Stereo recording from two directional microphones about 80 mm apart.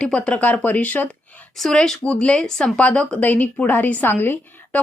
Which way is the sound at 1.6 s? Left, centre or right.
Centre.